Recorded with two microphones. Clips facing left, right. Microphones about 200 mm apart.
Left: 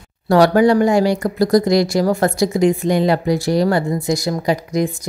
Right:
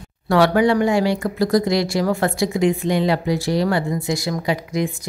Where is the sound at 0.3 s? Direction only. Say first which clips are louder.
Left 4 dB; 40° left (ahead or behind).